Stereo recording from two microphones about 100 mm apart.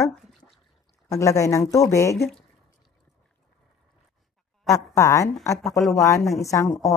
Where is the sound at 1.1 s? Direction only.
35° left (ahead or behind).